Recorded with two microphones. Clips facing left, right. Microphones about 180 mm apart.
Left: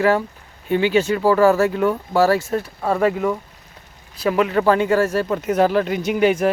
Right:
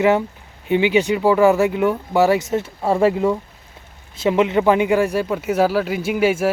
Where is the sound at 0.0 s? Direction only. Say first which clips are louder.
Right 1 dB; 20° right (ahead or behind).